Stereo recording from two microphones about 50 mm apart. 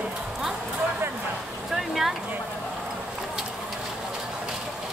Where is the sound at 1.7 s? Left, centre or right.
Centre.